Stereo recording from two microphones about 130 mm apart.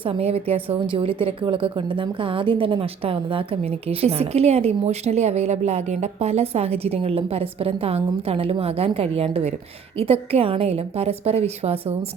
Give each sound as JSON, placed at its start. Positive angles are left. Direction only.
{"t": 0.0, "sound": "a woman's voice", "side_deg": -50}